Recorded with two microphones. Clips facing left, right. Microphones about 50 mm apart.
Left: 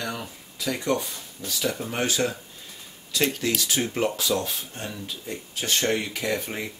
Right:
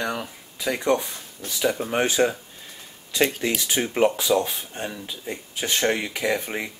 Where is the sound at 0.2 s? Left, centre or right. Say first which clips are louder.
Right 3 dB; right.